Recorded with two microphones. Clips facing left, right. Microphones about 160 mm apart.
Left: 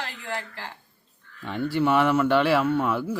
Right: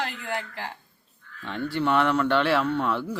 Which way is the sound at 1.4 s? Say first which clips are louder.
Left 3 dB; 10° left (ahead or behind).